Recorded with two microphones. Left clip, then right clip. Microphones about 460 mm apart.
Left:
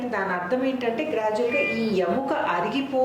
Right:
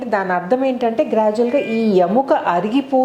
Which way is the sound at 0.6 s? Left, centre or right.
Right.